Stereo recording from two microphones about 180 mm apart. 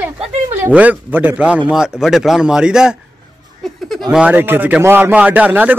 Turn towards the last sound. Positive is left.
turn(degrees=-10)  # may be behind; listen again after turning